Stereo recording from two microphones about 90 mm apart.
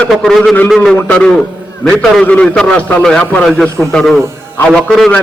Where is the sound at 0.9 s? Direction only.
15° left (ahead or behind).